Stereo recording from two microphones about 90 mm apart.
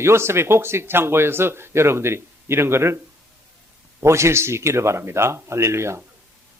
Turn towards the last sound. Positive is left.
turn(degrees=-30)  # may be behind; listen again after turning